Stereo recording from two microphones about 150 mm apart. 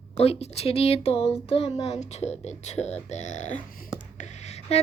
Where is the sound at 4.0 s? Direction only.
50° left (ahead or behind).